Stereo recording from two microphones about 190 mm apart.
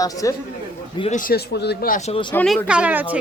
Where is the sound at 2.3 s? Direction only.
5° left (ahead or behind).